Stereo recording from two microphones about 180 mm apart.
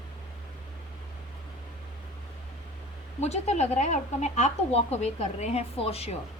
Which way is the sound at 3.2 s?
40° left (ahead or behind).